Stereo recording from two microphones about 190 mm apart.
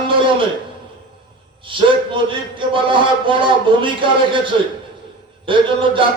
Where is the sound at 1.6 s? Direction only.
25° right (ahead or behind).